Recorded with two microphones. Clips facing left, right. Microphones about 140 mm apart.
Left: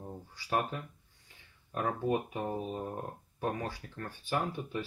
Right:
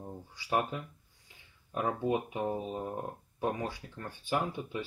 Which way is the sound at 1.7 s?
10° right (ahead or behind).